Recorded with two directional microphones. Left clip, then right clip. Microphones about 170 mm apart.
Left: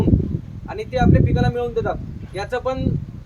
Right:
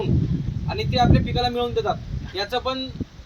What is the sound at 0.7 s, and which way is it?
A woman's voice, 10° left (ahead or behind).